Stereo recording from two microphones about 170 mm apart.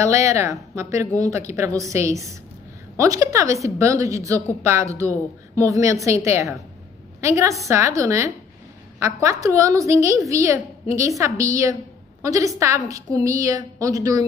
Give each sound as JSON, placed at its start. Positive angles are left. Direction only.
{"t": 0.0, "sound": "a woman's voice", "side_deg": -15}
{"t": 5.6, "sound": "a woman's voice", "side_deg": -20}